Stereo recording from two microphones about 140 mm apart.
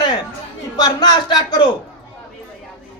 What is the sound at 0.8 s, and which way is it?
Speech, 30° left (ahead or behind).